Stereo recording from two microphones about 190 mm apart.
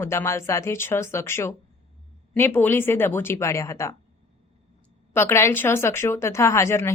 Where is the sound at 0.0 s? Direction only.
15° left (ahead or behind).